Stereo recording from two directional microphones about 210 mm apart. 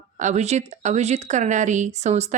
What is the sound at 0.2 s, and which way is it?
Speech, 35° right (ahead or behind).